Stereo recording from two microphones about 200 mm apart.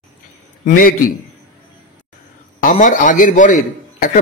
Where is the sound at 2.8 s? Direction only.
40° left (ahead or behind).